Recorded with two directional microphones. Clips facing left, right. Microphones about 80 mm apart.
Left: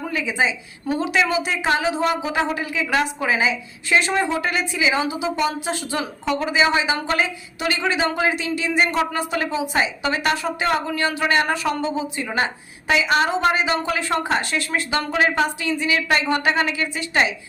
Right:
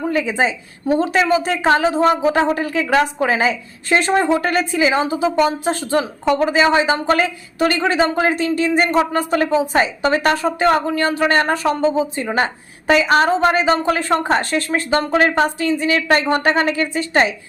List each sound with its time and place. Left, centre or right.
0.1 s a woman's voice: right